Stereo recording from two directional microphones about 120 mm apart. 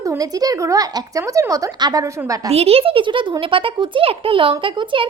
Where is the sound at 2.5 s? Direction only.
60° right (ahead or behind).